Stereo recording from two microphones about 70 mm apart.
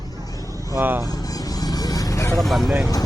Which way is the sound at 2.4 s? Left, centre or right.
Centre.